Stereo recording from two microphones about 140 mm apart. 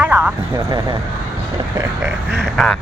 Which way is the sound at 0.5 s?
25° right (ahead or behind).